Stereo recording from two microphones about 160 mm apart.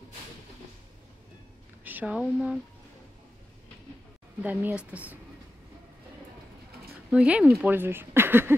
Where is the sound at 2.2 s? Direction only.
5° right (ahead or behind).